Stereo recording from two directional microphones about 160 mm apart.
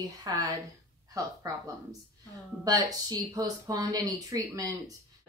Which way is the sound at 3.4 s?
20° right (ahead or behind).